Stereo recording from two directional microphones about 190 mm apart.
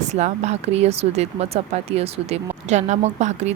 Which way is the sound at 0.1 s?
35° right (ahead or behind).